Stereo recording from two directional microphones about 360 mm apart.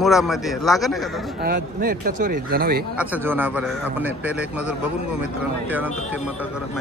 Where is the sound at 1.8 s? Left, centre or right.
Right.